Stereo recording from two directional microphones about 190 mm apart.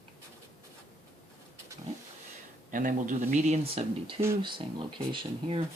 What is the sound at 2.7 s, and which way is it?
Speech, 45° right (ahead or behind).